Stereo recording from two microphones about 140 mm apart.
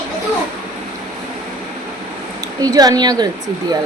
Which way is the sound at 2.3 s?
25° right (ahead or behind).